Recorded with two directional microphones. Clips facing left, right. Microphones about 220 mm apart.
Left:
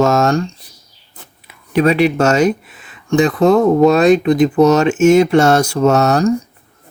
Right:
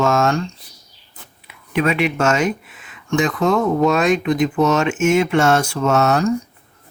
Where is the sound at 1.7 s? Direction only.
35° left (ahead or behind).